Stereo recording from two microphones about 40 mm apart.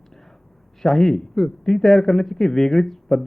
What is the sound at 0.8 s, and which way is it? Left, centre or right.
Speech, centre.